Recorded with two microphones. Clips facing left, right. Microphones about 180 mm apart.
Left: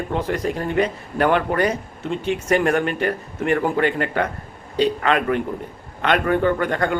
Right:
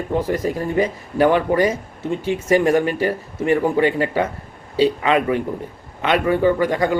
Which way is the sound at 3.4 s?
60° left (ahead or behind).